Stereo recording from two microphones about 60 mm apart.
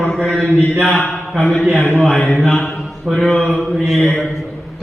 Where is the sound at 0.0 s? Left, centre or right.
Centre.